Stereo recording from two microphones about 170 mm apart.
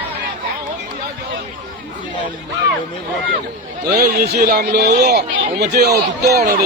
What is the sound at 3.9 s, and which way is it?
Speech, 60° right (ahead or behind).